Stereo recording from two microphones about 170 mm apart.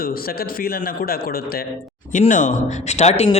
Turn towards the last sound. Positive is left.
turn(degrees=40)  # may be behind; listen again after turning